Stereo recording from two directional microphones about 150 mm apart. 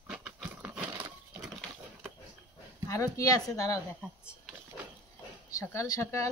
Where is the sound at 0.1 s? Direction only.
10° right (ahead or behind).